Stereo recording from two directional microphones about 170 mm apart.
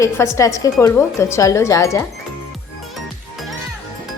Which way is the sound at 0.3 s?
20° left (ahead or behind).